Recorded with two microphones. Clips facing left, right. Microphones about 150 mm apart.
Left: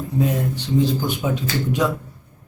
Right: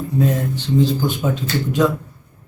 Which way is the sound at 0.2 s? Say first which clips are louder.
Right 2 dB; 15° left (ahead or behind).